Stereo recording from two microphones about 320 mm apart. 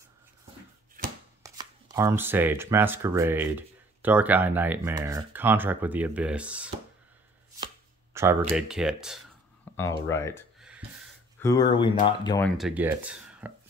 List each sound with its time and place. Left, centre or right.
1.4 s speech: centre
7.6 s chopping: centre
8.5 s speech: centre
9.8 s speech: centre